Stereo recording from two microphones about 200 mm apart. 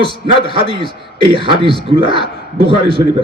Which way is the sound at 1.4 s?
25° right (ahead or behind).